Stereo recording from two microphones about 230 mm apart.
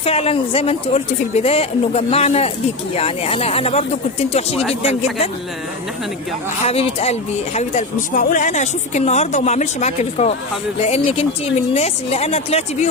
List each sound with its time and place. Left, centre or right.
0.0 s speech: left
6.7 s speech: left